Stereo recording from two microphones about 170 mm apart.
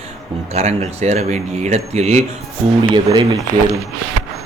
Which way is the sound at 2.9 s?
25° right (ahead or behind).